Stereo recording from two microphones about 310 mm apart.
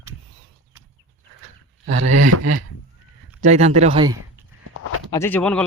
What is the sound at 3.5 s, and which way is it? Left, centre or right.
Speech, right.